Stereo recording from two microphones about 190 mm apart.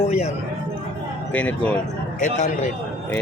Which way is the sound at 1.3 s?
10° left (ahead or behind).